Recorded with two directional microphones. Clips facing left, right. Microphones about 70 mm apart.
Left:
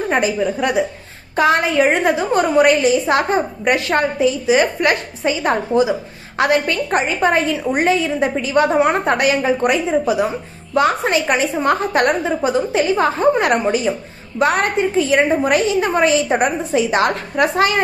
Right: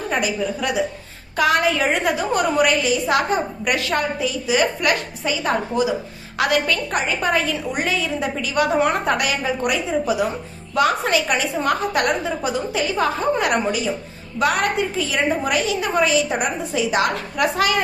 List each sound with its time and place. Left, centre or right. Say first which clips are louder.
0.1 s a woman's voice: left 4 dB; left